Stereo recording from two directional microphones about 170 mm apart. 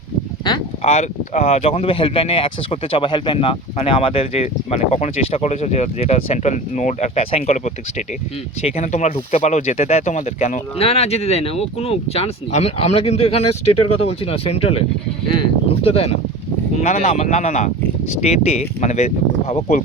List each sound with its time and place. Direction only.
0.8 s speech: 40° left (ahead or behind)